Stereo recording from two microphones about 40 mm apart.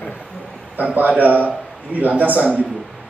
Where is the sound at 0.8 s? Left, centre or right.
Right.